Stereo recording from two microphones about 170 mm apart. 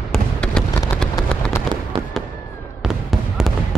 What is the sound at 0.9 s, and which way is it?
Vehicle, 5° left (ahead or behind).